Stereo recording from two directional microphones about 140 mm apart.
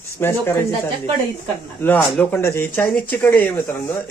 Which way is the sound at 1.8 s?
15° left (ahead or behind).